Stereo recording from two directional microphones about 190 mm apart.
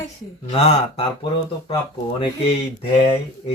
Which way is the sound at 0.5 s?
30° left (ahead or behind).